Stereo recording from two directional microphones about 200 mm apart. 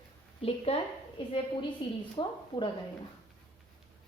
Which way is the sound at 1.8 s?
25° left (ahead or behind).